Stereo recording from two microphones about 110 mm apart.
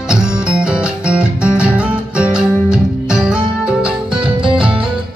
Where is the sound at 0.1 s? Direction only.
10° right (ahead or behind).